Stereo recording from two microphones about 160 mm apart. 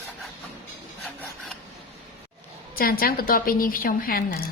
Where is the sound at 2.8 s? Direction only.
65° left (ahead or behind).